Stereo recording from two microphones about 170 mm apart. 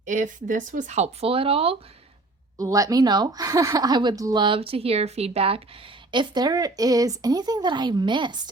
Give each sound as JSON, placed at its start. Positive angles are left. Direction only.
{"t": 0.0, "sound": "speech", "side_deg": -45}
{"t": 2.6, "sound": "a woman's voice", "side_deg": -20}